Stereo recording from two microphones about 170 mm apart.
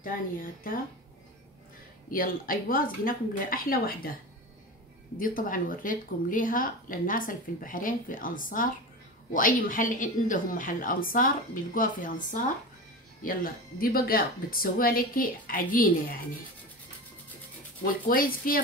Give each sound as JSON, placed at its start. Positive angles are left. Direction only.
{"t": 0.0, "sound": "speech", "side_deg": 55}
{"t": 2.0, "sound": "speech", "side_deg": 55}
{"t": 17.8, "sound": "speech", "side_deg": 55}